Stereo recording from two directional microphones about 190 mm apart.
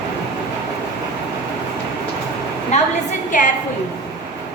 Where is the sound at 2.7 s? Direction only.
35° left (ahead or behind).